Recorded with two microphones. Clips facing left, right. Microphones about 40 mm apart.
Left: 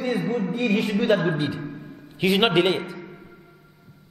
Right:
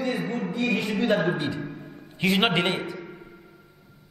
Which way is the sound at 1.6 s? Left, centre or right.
Centre.